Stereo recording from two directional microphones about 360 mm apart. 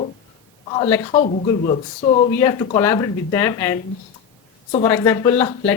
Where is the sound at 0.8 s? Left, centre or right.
Centre.